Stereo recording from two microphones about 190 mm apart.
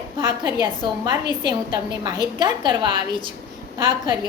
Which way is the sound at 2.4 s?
25° right (ahead or behind).